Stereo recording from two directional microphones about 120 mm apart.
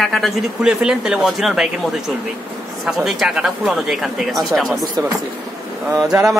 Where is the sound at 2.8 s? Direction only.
5° right (ahead or behind).